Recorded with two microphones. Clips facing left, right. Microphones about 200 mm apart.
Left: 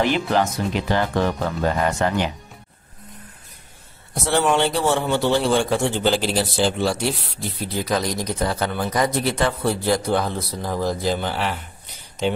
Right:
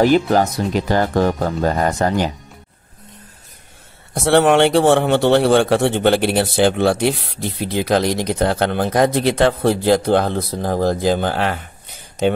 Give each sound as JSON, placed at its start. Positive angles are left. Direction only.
{"t": 0.0, "sound": "speech", "side_deg": -40}
{"t": 4.1, "sound": "a man's voice", "side_deg": -70}